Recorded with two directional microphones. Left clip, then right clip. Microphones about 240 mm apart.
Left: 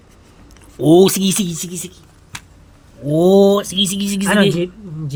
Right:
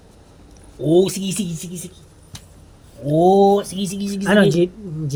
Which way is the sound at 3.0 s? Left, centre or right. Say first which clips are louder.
Left 2 dB; left.